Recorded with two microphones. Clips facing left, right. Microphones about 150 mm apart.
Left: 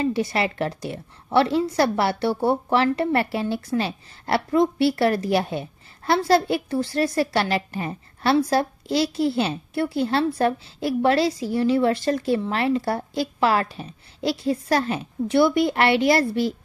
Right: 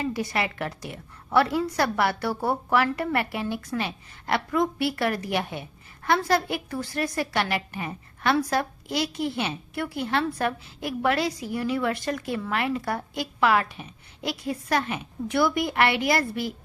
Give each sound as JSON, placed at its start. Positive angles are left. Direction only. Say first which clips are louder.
{"t": 0.0, "sound": "a woman's voice", "louder": "left 5 dB", "side_deg": 30}